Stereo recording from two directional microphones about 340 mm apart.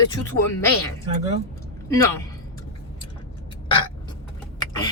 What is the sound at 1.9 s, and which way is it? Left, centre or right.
Speech, centre.